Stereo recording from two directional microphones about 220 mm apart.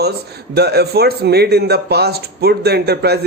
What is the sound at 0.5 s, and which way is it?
Speech, 45° right (ahead or behind).